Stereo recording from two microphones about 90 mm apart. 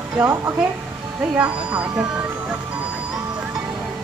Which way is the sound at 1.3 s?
15° right (ahead or behind).